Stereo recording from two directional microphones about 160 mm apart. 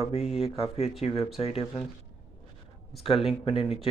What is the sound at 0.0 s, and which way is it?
Speech, 40° left (ahead or behind).